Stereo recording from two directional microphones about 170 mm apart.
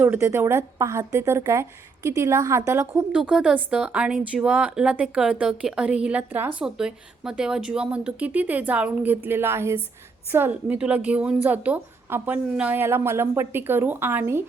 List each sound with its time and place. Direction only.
0.0 s speech: 15° right (ahead or behind)
3.2 s speech: 5° right (ahead or behind)